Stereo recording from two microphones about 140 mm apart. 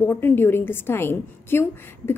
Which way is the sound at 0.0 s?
15° left (ahead or behind).